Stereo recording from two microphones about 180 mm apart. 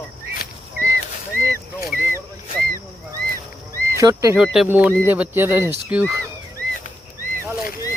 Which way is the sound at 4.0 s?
15° right (ahead or behind).